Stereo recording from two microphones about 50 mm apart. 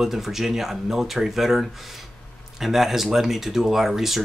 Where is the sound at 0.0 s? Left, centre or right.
Centre.